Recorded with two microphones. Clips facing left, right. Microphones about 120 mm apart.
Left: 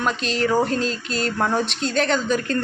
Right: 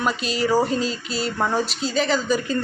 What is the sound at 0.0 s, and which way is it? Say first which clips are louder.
Speech: left 1 dB; 5° right (ahead or behind).